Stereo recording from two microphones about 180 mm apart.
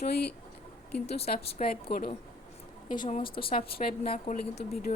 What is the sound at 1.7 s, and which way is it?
Speech, 55° left (ahead or behind).